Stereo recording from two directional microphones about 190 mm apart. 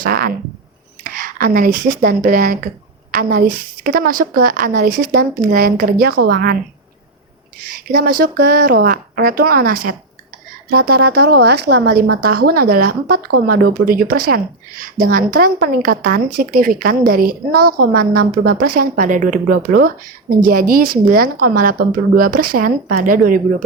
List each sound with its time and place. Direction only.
0.0 s speech: 50° right (ahead or behind)
7.9 s speech: 45° right (ahead or behind)